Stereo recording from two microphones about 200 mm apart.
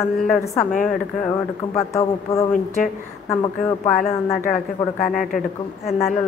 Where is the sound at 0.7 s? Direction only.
40° left (ahead or behind).